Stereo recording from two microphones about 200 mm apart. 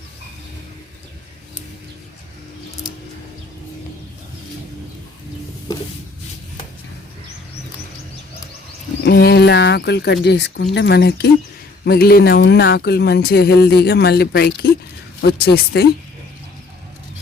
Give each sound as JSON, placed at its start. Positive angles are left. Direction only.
{"t": 9.0, "sound": "speech", "side_deg": 55}